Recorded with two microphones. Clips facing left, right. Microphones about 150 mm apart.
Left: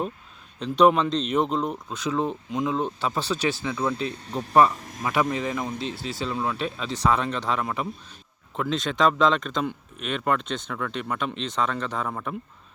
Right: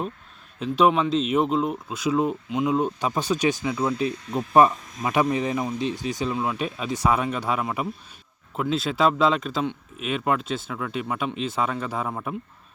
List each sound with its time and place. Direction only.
0.6 s speech: 5° right (ahead or behind)
5.0 s speech: 20° right (ahead or behind)